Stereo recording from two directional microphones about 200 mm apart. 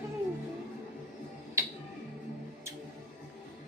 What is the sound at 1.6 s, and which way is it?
Music, 15° right (ahead or behind).